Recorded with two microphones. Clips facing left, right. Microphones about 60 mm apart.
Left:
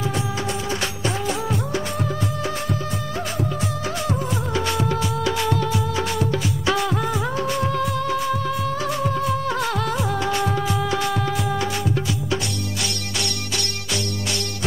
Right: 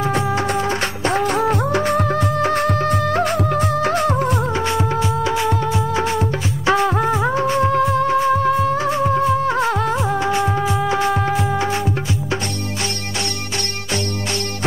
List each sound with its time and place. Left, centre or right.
0.1 s music: right
3.8 s music: right
4.6 s music: right